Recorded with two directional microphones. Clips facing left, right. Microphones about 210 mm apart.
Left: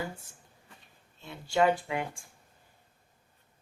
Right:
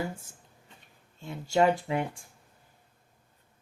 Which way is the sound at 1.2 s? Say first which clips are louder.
Right 2 dB; 45° right (ahead or behind).